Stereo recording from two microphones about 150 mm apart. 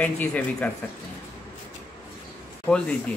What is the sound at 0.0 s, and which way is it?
Speech, 10° left (ahead or behind).